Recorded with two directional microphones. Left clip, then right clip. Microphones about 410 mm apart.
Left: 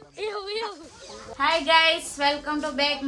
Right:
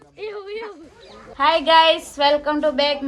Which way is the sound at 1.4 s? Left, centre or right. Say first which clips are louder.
Right 6 dB; centre.